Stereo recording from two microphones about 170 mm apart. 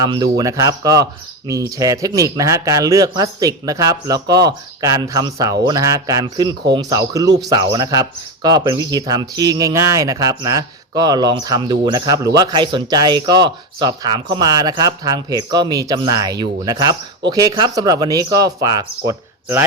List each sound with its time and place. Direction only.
0.0 s speech: 25° right (ahead or behind)